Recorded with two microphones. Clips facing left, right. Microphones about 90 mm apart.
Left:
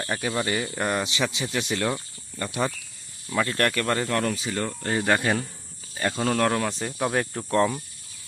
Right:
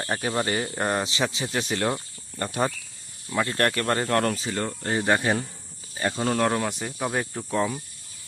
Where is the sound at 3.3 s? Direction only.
25° right (ahead or behind); by 4.5 s 45° right (ahead or behind).